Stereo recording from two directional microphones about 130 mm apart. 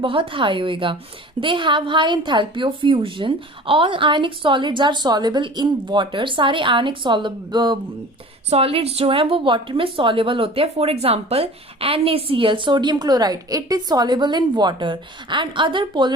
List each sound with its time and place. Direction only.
0.0 s a woman's voice: 40° right (ahead or behind)
8.4 s a woman's voice: 50° right (ahead or behind)